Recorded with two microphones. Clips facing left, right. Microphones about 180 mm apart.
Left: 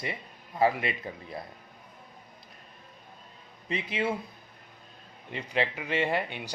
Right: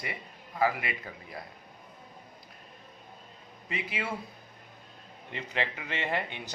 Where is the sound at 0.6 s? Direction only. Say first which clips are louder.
Left 3 dB; 25° left (ahead or behind).